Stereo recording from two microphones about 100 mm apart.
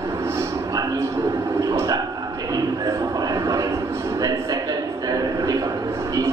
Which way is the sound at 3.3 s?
35° right (ahead or behind).